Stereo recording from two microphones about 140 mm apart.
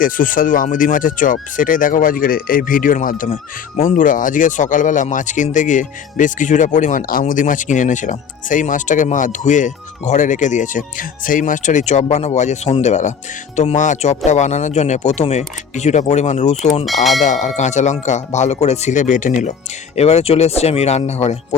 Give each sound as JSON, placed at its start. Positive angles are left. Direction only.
{"t": 0.0, "sound": "speech", "side_deg": 75}
{"t": 16.8, "sound": "speech", "side_deg": 0}
{"t": 17.2, "sound": "speech", "side_deg": 60}
{"t": 20.0, "sound": "speech", "side_deg": 45}